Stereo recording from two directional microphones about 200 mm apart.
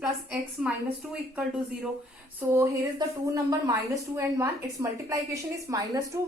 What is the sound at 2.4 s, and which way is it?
A woman's voice, 15° right (ahead or behind).